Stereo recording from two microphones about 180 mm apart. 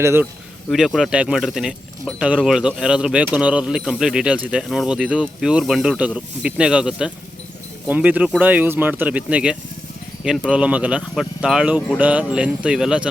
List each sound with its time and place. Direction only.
0.0 s speech: 15° right (ahead or behind)
0.7 s speech: centre (ahead or behind)